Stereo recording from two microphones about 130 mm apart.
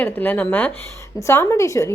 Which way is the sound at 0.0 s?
15° left (ahead or behind).